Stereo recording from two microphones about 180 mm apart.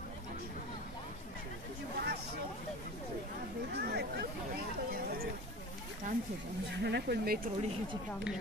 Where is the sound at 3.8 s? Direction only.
65° right (ahead or behind).